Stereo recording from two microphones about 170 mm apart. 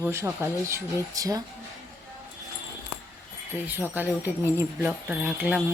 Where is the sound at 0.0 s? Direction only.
15° right (ahead or behind).